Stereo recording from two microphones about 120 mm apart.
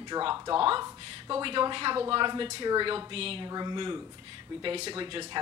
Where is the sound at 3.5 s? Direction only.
35° right (ahead or behind).